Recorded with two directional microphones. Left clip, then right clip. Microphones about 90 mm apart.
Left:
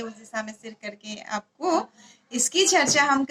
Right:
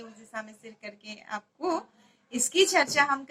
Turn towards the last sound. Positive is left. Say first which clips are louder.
# left 4 dB
turn(degrees=25)  # may be behind; listen again after turning